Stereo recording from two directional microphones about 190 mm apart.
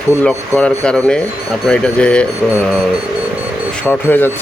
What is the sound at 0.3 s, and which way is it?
Speech, 5° left (ahead or behind).